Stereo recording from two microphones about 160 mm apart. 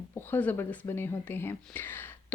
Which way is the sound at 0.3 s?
10° left (ahead or behind).